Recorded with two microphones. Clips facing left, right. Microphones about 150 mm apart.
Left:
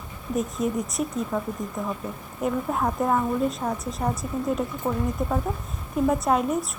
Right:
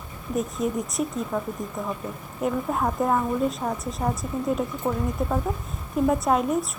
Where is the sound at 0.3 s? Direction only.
Centre (ahead or behind).